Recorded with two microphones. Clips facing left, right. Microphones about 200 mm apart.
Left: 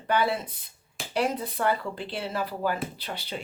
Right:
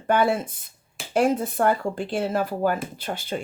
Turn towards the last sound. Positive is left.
turn(degrees=-50)  # may be behind; listen again after turning